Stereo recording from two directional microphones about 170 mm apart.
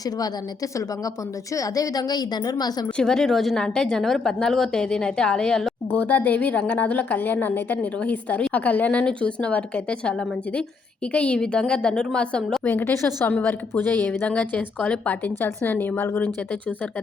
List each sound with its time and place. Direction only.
1.5 s a woman's voice: 20° left (ahead or behind)
3.0 s speech: 5° left (ahead or behind)